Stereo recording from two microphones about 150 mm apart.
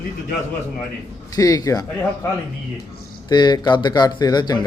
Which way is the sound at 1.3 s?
25° left (ahead or behind).